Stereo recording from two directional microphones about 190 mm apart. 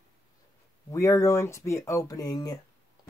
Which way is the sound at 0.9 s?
15° left (ahead or behind).